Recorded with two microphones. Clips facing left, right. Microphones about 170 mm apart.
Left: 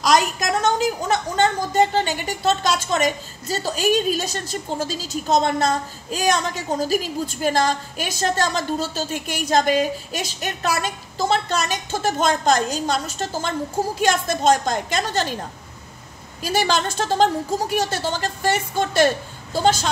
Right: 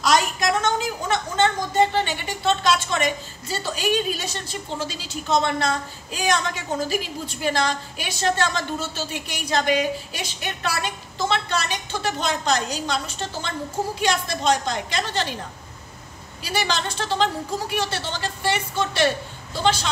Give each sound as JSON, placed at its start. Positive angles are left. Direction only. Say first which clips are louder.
{"t": 0.4, "sound": "a woman's voice", "louder": "left 2 dB", "side_deg": 40}
{"t": 16.4, "sound": "a woman's voice", "louder": "left 5 dB", "side_deg": 45}